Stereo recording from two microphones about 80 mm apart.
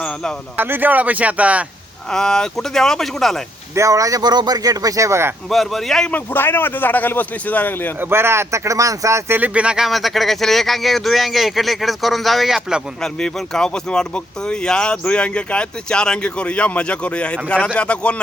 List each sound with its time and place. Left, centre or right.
0.5 s speech: right
2.1 s speech: centre
3.8 s speech: right
5.5 s speech: centre
6.1 s a man's voice: left
8.1 s speech: right
9.3 s speech: centre
13.0 s speech: centre